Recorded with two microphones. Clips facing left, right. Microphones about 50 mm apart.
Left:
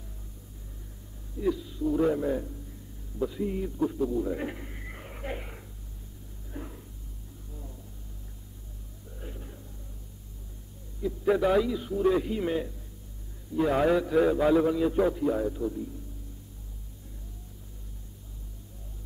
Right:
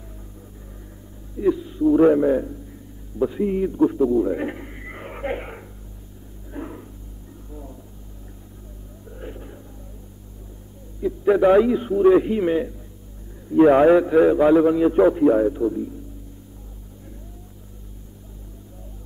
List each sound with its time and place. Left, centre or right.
1.4 s a man's voice: right
6.5 s a sound: right
9.2 s a sound: right
11.0 s a man's voice: right
11.6 s a man's voice: right
13.5 s a man's voice: right